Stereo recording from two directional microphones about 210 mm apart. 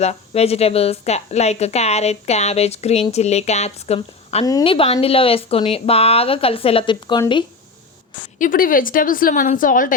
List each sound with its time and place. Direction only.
0.0 s a woman's voice: 30° left (ahead or behind)
8.4 s a woman's voice: 40° left (ahead or behind)